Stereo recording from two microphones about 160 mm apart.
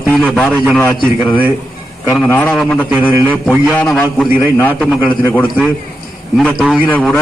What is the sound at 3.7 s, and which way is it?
Speech, 10° left (ahead or behind).